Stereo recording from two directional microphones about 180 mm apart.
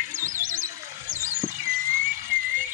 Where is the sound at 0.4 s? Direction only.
45° right (ahead or behind).